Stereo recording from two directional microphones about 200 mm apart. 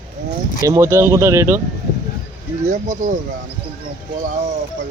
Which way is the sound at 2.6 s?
40° right (ahead or behind).